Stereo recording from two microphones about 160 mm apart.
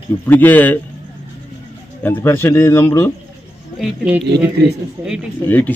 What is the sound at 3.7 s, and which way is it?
Speech, 10° right (ahead or behind).